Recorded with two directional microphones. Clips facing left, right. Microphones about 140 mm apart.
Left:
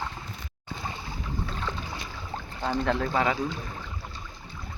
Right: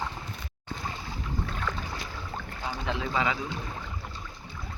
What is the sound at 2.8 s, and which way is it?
Speech, 50° left (ahead or behind).